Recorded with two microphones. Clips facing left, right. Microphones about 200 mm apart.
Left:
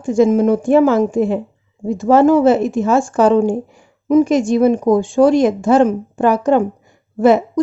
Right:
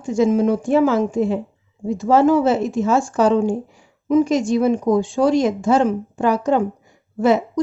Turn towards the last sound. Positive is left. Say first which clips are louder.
# left 4 dB
turn(degrees=55)  # may be behind; listen again after turning